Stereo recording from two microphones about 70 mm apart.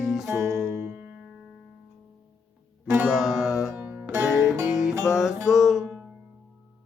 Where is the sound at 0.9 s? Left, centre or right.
Right.